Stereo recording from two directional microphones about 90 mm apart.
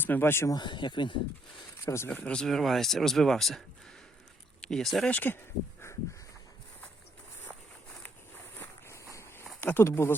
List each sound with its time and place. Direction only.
0.0 s speech: 25° left (ahead or behind)
0.5 s speech: 60° left (ahead or behind)
1.8 s speech: 30° left (ahead or behind)
2.0 s speech: 10° left (ahead or behind)
5.0 s speech: 20° left (ahead or behind)
8.5 s a sound: 20° left (ahead or behind)
9.0 s a sound: 35° left (ahead or behind)
9.6 s a sound: 20° left (ahead or behind)
9.8 s speech: 30° left (ahead or behind)